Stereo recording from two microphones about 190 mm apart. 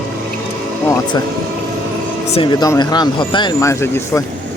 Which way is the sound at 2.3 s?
25° left (ahead or behind).